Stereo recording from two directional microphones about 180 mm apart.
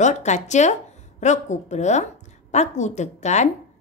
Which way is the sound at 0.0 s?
40° left (ahead or behind).